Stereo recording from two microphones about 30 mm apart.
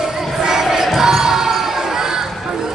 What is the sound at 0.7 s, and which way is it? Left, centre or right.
Basketball bounce, centre.